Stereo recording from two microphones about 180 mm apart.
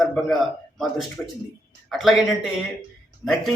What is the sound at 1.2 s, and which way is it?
A man's voice, centre (ahead or behind).